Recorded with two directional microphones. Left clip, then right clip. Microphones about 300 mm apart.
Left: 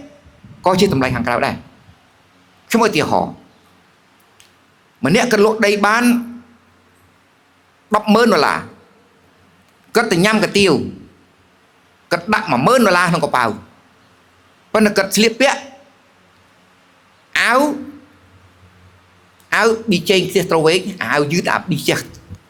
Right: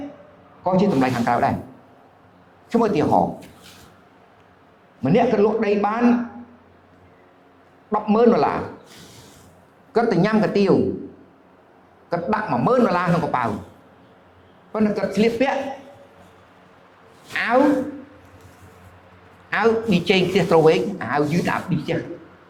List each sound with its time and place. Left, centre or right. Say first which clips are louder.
0.6 s speech: left 5 dB; left
2.6 s a man's voice: left 4 dB; left
5.0 s speech: left 4 dB; left
7.9 s a man's voice: left 4 dB; left
9.9 s speech: left 5 dB; left
12.0 s speech: left 6 dB; left
14.7 s a man's voice: left 8 dB; left
17.3 s speech: left 6 dB; left
19.5 s speech: left 4 dB; left